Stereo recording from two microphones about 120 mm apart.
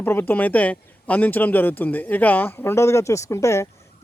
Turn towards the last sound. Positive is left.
turn(degrees=25)  # may be behind; listen again after turning